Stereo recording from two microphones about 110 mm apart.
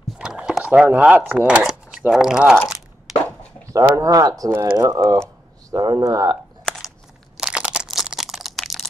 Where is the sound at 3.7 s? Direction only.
30° right (ahead or behind).